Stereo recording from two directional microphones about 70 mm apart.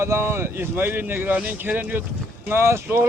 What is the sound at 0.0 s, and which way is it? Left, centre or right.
Speech, right.